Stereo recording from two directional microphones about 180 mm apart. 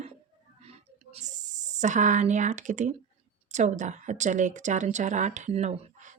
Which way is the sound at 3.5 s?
40° right (ahead or behind).